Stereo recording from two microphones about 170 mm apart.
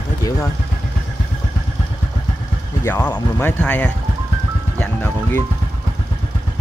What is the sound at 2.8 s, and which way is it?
Speech, 15° left (ahead or behind).